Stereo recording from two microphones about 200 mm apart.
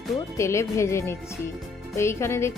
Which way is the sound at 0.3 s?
15° left (ahead or behind).